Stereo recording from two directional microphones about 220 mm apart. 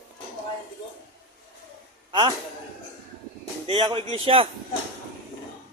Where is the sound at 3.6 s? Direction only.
20° right (ahead or behind).